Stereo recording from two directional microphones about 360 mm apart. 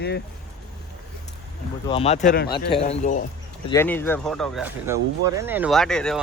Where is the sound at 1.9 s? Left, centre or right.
Centre.